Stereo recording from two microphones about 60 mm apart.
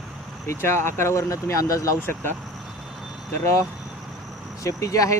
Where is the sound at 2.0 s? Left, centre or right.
Left.